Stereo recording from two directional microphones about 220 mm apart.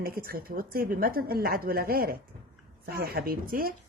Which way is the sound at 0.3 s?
40° right (ahead or behind).